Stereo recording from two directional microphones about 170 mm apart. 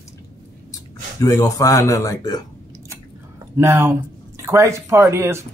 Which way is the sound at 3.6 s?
15° right (ahead or behind).